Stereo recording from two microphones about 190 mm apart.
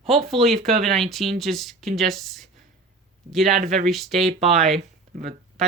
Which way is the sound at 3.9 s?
Centre (ahead or behind).